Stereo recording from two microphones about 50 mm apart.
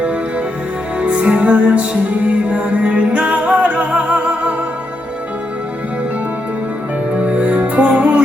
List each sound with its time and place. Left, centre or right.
0.0 s music: right
7.2 s music: right